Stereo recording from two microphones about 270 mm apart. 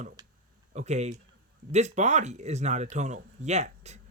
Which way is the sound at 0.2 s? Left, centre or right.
Centre.